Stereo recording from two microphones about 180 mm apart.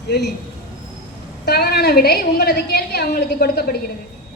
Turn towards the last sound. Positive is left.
turn(degrees=60)  # may be behind; listen again after turning